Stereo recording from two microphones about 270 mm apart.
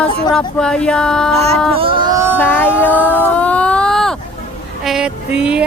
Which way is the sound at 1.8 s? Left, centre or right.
Centre.